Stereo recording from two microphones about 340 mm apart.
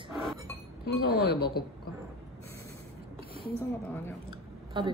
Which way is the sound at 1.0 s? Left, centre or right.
Left.